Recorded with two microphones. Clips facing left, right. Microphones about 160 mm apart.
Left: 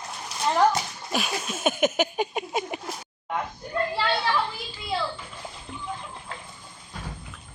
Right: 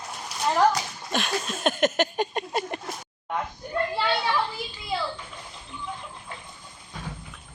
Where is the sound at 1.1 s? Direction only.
5° left (ahead or behind).